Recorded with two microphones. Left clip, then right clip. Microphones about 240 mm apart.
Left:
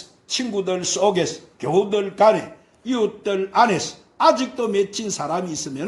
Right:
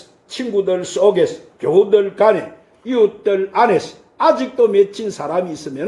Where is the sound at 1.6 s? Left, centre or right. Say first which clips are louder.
Right 7 dB; left.